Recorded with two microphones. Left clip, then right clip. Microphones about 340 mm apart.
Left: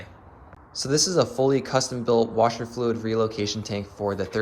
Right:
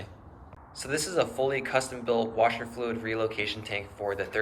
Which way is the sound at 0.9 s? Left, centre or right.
Centre.